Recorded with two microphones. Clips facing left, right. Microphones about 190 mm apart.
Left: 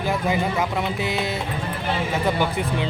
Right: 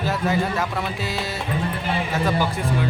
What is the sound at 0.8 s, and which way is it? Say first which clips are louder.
Speech: left 2 dB; 20° left (ahead or behind).